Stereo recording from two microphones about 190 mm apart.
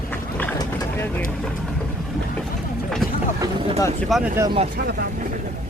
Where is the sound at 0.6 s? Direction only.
10° left (ahead or behind).